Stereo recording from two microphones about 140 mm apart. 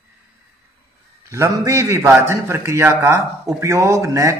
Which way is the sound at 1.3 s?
20° right (ahead or behind).